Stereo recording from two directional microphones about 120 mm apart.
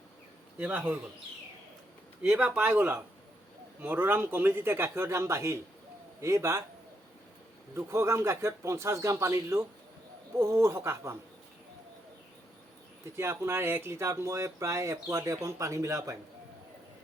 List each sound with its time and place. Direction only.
0.6 s a man's voice: 10° right (ahead or behind)
2.2 s a man's voice: 10° right (ahead or behind); by 6.6 s 25° right (ahead or behind)
7.8 s speech: 20° right (ahead or behind)
13.1 s speech: 25° right (ahead or behind)